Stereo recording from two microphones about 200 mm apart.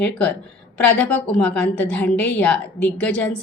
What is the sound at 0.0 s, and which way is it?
A woman's voice, 5° left (ahead or behind).